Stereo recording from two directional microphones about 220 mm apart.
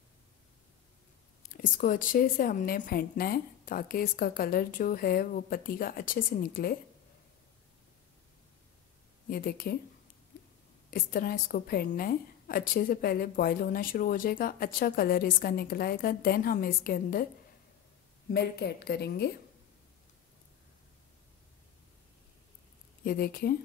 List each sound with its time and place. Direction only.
1.5 s a woman's voice: 40° left (ahead or behind)
9.3 s a woman's voice: 40° left (ahead or behind)
10.9 s a woman's voice: 40° left (ahead or behind)
18.3 s a woman's voice: 50° left (ahead or behind)
23.0 s a woman's voice: 45° left (ahead or behind)